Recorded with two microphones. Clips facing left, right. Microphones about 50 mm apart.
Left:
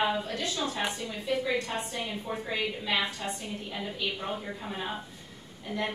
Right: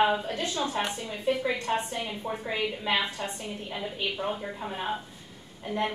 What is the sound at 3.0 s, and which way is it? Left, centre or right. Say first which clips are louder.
A woman's voice: right 1 dB; right.